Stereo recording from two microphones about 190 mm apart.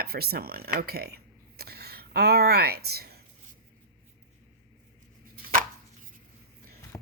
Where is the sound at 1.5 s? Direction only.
55° right (ahead or behind).